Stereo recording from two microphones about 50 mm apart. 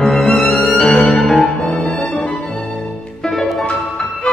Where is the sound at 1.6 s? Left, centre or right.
Centre.